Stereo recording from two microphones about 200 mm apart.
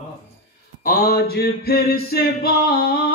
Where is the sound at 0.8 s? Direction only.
50° left (ahead or behind).